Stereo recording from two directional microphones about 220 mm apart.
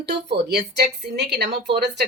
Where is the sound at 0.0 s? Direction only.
50° right (ahead or behind).